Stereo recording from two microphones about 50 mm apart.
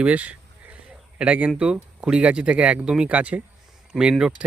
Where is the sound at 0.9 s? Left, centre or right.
Right.